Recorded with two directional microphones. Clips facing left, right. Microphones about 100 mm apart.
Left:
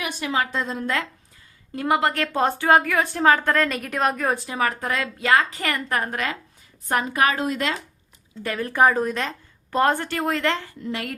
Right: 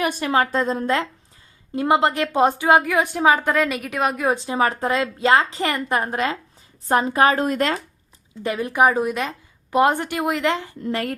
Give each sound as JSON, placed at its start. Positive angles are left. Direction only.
{"t": 0.0, "sound": "a woman's voice", "side_deg": -45}
{"t": 4.3, "sound": "a woman's voice", "side_deg": -25}
{"t": 7.3, "sound": "a woman's voice", "side_deg": -45}
{"t": 8.4, "sound": "a woman's voice", "side_deg": -15}
{"t": 10.8, "sound": "a woman's voice", "side_deg": -40}